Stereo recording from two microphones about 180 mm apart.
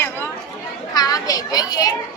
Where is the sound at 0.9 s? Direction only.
20° left (ahead or behind).